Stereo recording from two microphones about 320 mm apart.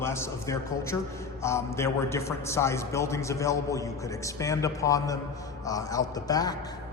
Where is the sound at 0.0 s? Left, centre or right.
Centre.